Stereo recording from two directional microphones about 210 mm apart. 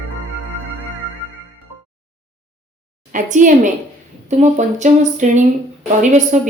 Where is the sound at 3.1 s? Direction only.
40° right (ahead or behind).